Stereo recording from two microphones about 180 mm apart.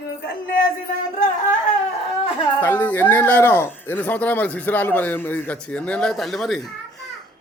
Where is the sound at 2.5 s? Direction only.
10° left (ahead or behind).